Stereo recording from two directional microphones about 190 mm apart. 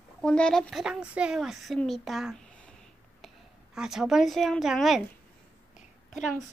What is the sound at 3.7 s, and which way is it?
A woman's voice, 5° right (ahead or behind).